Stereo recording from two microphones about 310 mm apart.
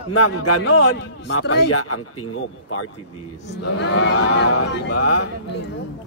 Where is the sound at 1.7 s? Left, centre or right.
Left.